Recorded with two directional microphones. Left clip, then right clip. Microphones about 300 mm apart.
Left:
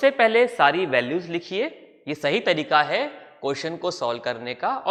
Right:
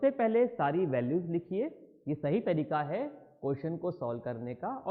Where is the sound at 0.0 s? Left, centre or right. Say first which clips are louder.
Left 10 dB; centre.